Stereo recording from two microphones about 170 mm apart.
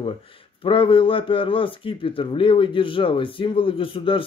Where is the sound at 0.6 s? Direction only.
30° left (ahead or behind).